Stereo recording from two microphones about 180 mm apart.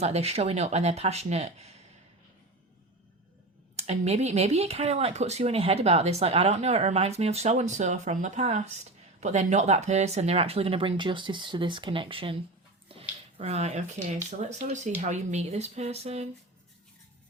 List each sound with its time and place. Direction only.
0.0 s speech: 35° right (ahead or behind)
3.8 s speech: 40° right (ahead or behind)
12.9 s a sound: 35° right (ahead or behind)
14.3 s speech: 40° right (ahead or behind)